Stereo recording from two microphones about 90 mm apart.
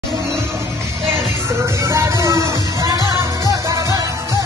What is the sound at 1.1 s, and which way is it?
Music, 30° right (ahead or behind).